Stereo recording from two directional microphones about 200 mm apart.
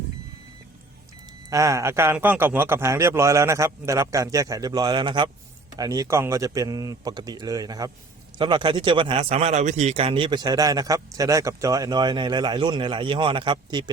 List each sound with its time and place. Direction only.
1.5 s a man's voice: 15° right (ahead or behind)